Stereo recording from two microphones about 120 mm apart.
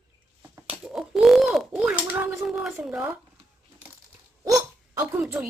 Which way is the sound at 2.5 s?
5° right (ahead or behind).